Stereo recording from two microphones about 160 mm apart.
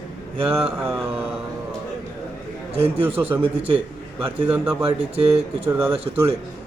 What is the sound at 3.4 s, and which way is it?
A man's voice, 35° right (ahead or behind).